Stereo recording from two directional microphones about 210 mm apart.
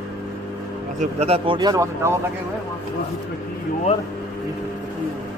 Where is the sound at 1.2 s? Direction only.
25° right (ahead or behind).